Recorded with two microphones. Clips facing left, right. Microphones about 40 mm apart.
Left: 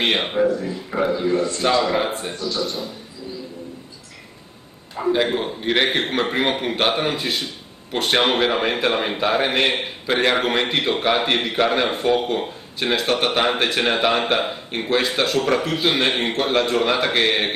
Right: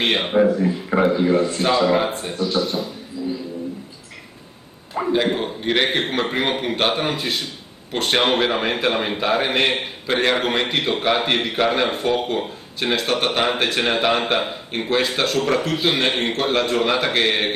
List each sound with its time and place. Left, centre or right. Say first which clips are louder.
0.0 s a man's voice: right 1 dB; centre
0.6 s speech: right 5 dB; right
1.0 s speech: right 2 dB; centre
1.6 s a man's voice: right 1 dB; centre
2.3 s speech: right 4 dB; centre
5.1 s a man's voice: right 1 dB; centre